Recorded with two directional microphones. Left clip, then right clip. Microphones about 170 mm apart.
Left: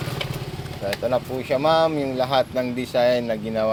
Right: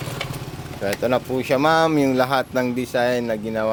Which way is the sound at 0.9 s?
60° right (ahead or behind).